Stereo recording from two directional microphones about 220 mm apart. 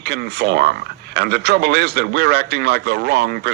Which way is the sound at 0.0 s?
50° right (ahead or behind).